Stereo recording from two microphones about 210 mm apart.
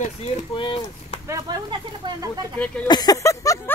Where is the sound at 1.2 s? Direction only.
15° right (ahead or behind).